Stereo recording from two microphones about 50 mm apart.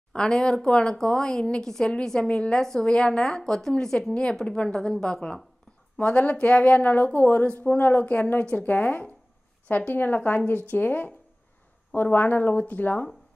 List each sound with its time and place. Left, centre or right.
0.1 s a woman's voice: centre
4.7 s a woman's voice: centre
6.0 s speech: left